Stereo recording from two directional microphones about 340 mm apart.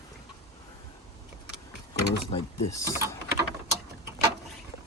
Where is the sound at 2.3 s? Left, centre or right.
Centre.